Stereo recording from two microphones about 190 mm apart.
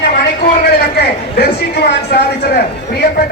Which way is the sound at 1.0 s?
55° left (ahead or behind).